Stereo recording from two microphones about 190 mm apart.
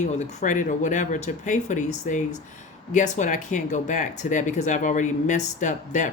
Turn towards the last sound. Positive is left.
turn(degrees=40)  # may be behind; listen again after turning